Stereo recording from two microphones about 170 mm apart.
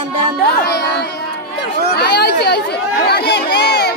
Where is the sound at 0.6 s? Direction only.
75° left (ahead or behind).